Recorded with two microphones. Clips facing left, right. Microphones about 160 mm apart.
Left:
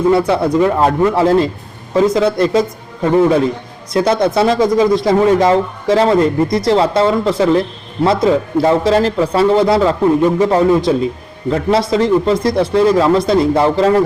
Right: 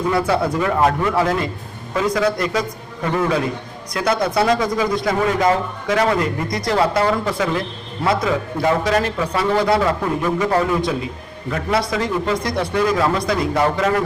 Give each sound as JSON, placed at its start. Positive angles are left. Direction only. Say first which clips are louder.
{"t": 0.1, "sound": "a man's voice", "louder": "left 6 dB", "side_deg": 25}